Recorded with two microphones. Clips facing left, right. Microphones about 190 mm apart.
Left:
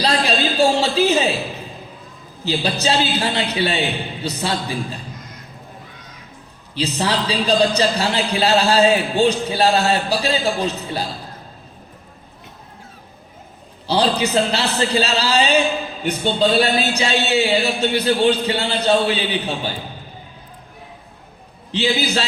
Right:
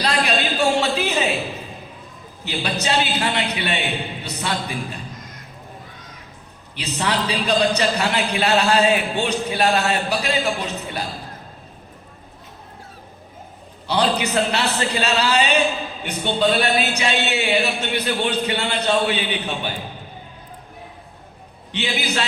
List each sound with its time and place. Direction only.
0.0 s a sound: 30° left (ahead or behind)
2.4 s a woman's voice: 30° left (ahead or behind)
6.7 s a man's voice: 30° left (ahead or behind)
13.8 s a man's voice: 30° left (ahead or behind)
21.7 s a man's voice: 30° left (ahead or behind)